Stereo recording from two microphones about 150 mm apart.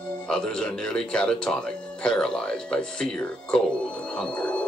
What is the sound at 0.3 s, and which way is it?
Speech, 5° left (ahead or behind).